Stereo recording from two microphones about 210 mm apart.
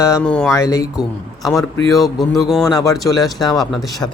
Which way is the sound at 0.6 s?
15° left (ahead or behind).